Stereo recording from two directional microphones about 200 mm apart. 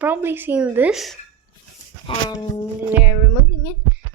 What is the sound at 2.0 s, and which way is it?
Speech, 25° left (ahead or behind).